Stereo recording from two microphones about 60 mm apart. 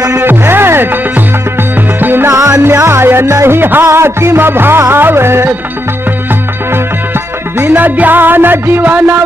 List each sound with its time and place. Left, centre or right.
0.2 s music: right
2.3 s music: right
7.6 s music: right